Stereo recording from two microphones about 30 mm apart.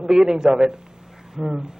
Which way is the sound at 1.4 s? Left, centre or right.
Centre.